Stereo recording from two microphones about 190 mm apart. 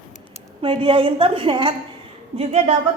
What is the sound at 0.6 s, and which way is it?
A woman's voice, 30° right (ahead or behind).